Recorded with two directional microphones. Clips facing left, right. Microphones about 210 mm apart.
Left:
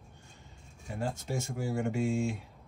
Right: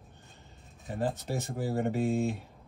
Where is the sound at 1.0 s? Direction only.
35° right (ahead or behind).